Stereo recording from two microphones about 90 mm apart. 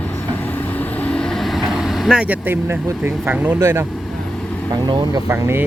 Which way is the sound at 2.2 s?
20° right (ahead or behind).